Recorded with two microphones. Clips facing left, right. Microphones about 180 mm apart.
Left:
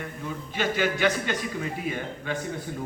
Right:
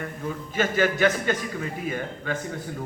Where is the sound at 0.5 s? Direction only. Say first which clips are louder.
Right 3 dB; 45° right (ahead or behind).